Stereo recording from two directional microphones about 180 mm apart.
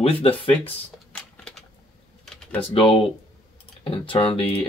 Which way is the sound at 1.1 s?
5° left (ahead or behind).